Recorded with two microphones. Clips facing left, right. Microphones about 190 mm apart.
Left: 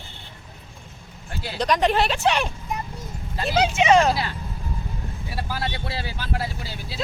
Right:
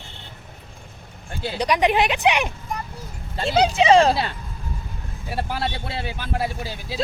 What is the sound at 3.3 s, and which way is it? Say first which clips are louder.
Speech: right 2 dB; 30° right (ahead or behind).